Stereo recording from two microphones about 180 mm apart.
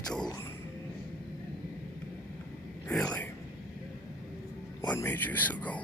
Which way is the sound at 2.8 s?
5° left (ahead or behind).